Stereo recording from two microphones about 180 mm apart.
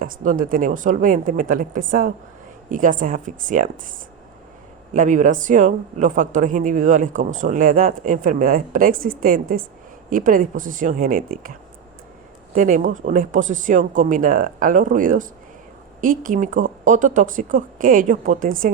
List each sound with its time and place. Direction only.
0.0 s speech: 50° right (ahead or behind)
4.9 s speech: 45° right (ahead or behind)
12.5 s speech: 45° right (ahead or behind)